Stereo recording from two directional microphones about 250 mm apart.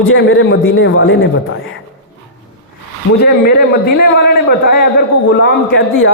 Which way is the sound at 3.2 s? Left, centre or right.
Left.